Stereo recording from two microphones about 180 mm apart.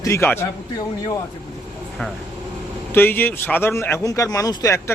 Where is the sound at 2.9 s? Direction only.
10° left (ahead or behind).